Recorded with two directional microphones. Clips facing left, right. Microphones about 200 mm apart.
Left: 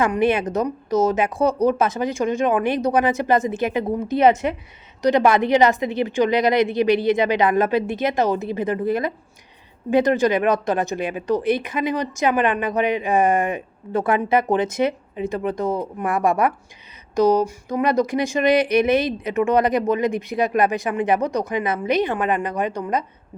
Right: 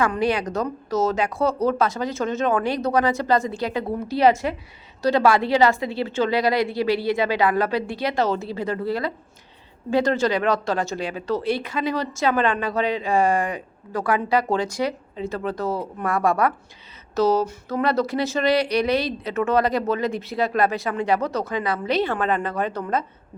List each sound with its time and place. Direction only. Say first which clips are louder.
0.0 s speech: left 3 dB; 20° left (ahead or behind)